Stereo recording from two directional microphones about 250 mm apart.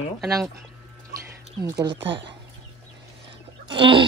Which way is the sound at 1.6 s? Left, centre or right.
Centre.